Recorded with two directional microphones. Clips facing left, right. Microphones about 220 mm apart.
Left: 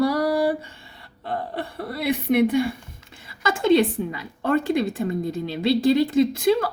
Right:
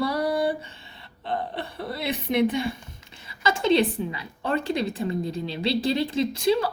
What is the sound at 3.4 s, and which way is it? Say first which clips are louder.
A woman's voice: left 3 dB; 50° left (ahead or behind).